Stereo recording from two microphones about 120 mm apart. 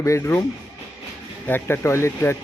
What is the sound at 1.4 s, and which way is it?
Speech, 20° left (ahead or behind).